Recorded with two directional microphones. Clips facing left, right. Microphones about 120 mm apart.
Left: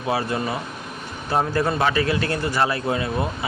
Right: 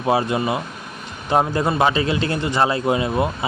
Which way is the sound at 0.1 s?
20° right (ahead or behind).